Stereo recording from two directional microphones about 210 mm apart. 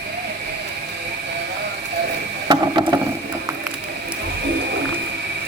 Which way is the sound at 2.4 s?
20° right (ahead or behind).